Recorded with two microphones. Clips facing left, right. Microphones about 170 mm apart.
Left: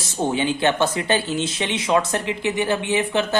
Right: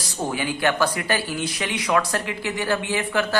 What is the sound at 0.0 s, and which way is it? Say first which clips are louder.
A man's voice: left 4 dB; 25° left (ahead or behind).